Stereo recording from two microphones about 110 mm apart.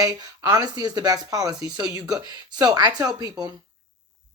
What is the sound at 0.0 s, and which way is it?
Speech, 40° right (ahead or behind).